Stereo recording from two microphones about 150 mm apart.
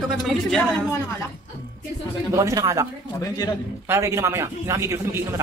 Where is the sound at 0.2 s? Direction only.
Centre (ahead or behind).